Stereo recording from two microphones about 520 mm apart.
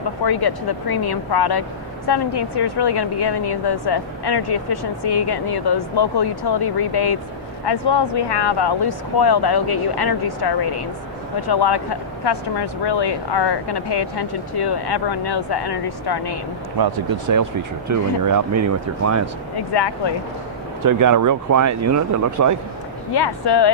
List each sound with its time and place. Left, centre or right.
0.3 s a woman's voice: left
16.7 s speech: right
19.7 s a woman's voice: left
20.8 s speech: right
23.1 s a woman's voice: left